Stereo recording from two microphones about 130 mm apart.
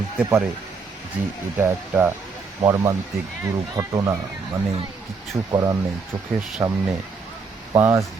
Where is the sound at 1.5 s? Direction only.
15° right (ahead or behind).